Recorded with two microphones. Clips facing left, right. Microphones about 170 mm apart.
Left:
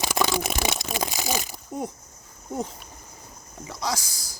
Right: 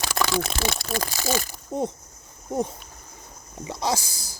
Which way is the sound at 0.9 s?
15° left (ahead or behind).